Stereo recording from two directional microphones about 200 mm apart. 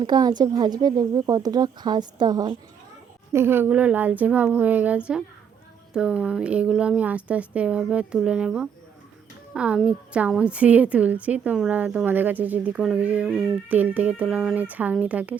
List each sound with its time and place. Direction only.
0.0 s a woman's voice: 20° right (ahead or behind)